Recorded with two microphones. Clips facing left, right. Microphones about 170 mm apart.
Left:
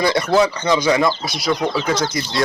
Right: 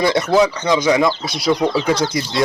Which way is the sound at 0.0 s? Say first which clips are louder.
Right 1 dB; 25° right (ahead or behind).